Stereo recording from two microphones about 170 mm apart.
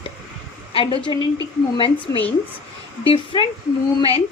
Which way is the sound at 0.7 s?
30° left (ahead or behind).